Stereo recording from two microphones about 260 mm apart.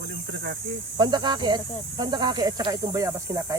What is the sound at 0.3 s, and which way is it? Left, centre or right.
Speech, right.